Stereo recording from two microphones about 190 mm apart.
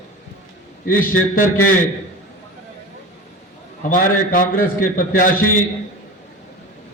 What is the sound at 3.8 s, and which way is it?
A man's voice, 45° left (ahead or behind).